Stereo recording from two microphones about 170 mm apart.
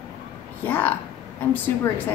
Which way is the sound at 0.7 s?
10° left (ahead or behind).